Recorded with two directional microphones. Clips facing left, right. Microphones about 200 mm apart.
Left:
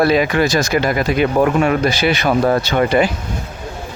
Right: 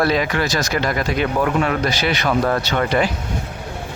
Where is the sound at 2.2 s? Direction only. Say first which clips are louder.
Left 3 dB; 25° left (ahead or behind).